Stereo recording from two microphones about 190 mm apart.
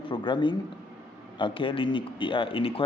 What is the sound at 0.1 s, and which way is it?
Speech, 25° left (ahead or behind).